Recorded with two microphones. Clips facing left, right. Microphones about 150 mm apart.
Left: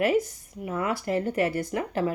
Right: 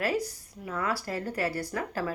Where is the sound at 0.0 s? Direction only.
20° left (ahead or behind).